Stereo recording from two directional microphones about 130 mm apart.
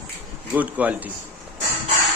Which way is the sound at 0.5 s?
10° right (ahead or behind).